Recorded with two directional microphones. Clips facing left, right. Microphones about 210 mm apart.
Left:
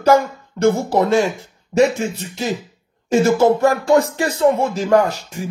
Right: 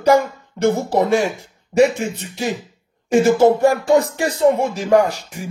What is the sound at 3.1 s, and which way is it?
Music, 15° right (ahead or behind).